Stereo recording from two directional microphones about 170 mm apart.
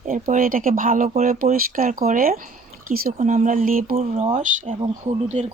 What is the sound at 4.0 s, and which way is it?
Speech, 40° right (ahead or behind).